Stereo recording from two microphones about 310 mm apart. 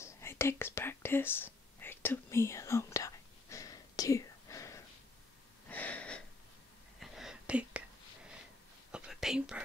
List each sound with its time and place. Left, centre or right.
0.0 s whispering: centre
5.7 s wheeze: centre
7.0 s whispering: centre
8.9 s whispering: centre